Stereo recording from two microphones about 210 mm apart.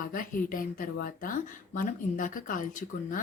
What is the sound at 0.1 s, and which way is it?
Speech, 40° left (ahead or behind).